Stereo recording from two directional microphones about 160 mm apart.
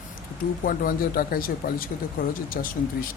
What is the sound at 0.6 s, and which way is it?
Speech, 65° left (ahead or behind).